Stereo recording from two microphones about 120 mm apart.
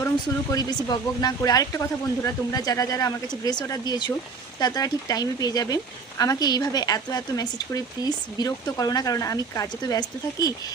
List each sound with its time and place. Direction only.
0.5 s speech: 35° left (ahead or behind)